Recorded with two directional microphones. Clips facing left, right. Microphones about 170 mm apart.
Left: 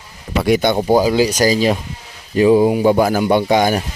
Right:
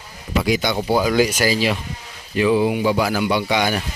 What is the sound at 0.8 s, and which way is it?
Speech, 35° left (ahead or behind).